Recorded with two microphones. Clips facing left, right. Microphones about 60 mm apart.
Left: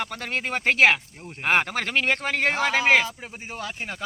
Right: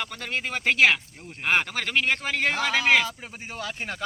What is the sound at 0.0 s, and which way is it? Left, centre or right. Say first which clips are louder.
Speech: left 2 dB; left.